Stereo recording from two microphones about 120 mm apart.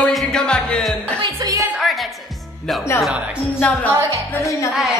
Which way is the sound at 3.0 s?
5° right (ahead or behind).